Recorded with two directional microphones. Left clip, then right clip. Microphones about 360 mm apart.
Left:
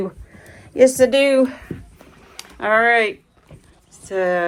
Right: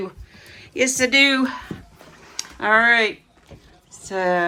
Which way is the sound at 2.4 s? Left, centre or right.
Centre.